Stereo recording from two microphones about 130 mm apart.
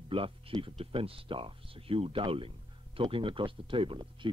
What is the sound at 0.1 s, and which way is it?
Speech, 45° right (ahead or behind).